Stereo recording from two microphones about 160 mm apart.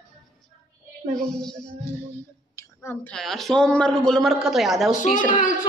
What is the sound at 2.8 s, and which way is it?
Speech, 15° left (ahead or behind).